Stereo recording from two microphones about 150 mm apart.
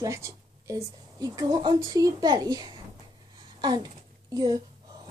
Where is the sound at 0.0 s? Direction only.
20° right (ahead or behind).